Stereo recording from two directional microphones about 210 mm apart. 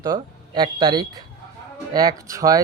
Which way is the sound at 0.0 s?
20° right (ahead or behind).